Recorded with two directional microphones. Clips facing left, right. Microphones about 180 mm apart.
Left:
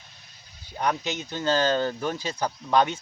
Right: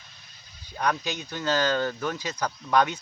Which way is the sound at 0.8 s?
25° left (ahead or behind).